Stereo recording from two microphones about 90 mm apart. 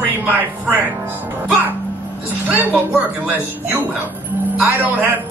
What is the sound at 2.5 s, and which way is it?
Speech, 20° right (ahead or behind).